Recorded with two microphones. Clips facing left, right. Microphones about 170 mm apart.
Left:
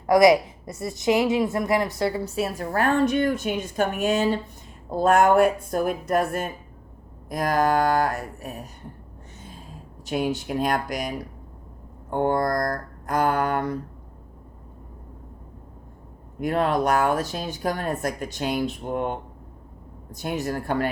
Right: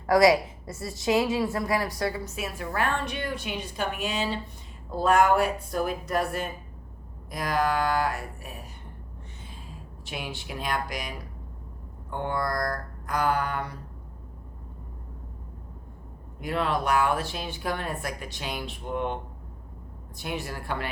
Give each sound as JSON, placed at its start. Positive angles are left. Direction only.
{"t": 0.1, "sound": "a woman's voice", "side_deg": 20}
{"t": 9.4, "sound": "a sound", "side_deg": 45}
{"t": 10.1, "sound": "speech", "side_deg": 45}
{"t": 12.1, "sound": "speech", "side_deg": 45}
{"t": 16.4, "sound": "speech", "side_deg": 45}
{"t": 20.1, "sound": "speech", "side_deg": 45}